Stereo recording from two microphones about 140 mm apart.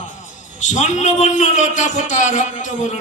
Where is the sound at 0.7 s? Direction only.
60° left (ahead or behind).